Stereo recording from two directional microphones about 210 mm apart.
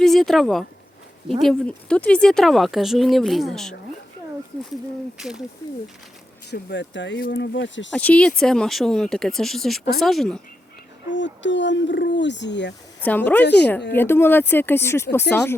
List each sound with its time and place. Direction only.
0.0 s speech: centre (ahead or behind)
5.1 s speech: centre (ahead or behind)
6.5 s speech: 55° left (ahead or behind)
7.9 s speech: 5° left (ahead or behind)
11.1 s speech: 60° left (ahead or behind)
13.0 s speech: 10° left (ahead or behind)